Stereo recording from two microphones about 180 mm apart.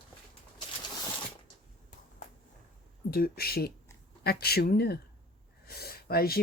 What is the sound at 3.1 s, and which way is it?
Speech, 55° left (ahead or behind).